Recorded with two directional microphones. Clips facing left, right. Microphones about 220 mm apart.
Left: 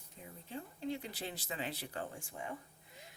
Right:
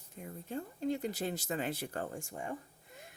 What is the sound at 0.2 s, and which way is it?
Speech, 50° right (ahead or behind).